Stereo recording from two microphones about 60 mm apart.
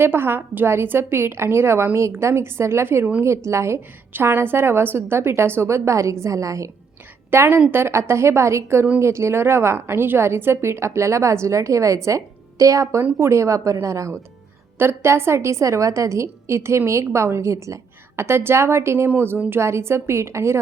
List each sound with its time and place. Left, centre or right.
0.0 s a woman's voice: right
4.1 s a woman's voice: right
7.3 s a woman's voice: right
14.8 s a woman's voice: right
18.2 s a woman's voice: right